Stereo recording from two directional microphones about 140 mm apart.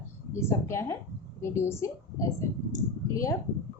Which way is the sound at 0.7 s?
20° left (ahead or behind).